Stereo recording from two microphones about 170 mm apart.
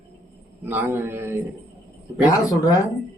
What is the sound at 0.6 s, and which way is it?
Speech, 10° right (ahead or behind).